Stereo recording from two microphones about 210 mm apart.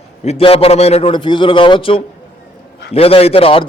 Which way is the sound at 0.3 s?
25° left (ahead or behind).